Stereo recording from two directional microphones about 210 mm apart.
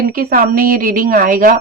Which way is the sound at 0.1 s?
40° right (ahead or behind).